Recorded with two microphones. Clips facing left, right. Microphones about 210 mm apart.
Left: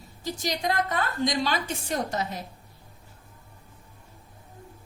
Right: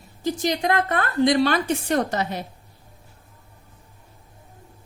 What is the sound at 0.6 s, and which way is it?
A woman's voice, 65° right (ahead or behind).